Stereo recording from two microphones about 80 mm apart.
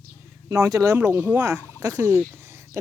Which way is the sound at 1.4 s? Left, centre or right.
Right.